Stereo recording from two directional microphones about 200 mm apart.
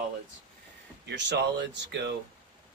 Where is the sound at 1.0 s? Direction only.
60° right (ahead or behind).